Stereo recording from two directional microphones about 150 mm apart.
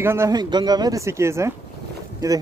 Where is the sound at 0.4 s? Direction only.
30° right (ahead or behind).